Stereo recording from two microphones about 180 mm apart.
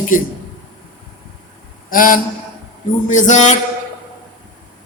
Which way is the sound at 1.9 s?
50° left (ahead or behind).